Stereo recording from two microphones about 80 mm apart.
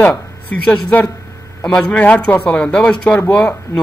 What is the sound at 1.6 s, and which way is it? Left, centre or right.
A man's voice, centre.